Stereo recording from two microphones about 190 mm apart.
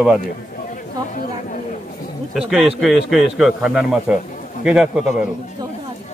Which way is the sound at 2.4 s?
Centre (ahead or behind).